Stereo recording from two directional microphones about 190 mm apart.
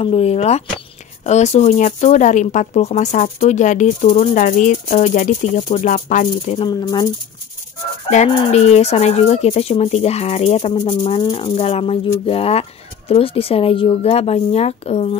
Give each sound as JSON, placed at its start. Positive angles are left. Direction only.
{"t": 0.0, "sound": "speech", "side_deg": 30}
{"t": 8.1, "sound": "speech", "side_deg": 35}